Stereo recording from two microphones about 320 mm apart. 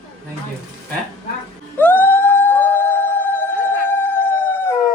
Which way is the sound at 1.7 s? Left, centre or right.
Centre.